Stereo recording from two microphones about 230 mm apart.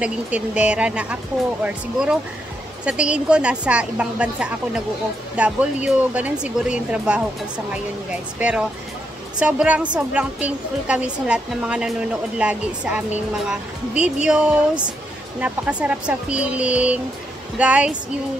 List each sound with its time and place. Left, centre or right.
0.0 s speech: centre